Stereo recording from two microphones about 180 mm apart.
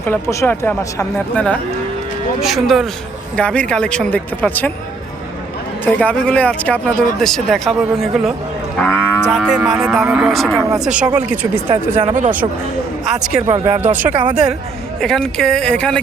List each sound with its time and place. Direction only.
0.0 s speech: 15° left (ahead or behind)
2.4 s speech: centre (ahead or behind)
5.8 s speech: 5° left (ahead or behind)
9.2 s speech: 5° right (ahead or behind)
11.9 s speech: 40° right (ahead or behind)
13.1 s speech: 5° right (ahead or behind)
13.5 s speech: 15° right (ahead or behind)
14.1 s speech: 25° right (ahead or behind)
15.0 s speech: 5° left (ahead or behind)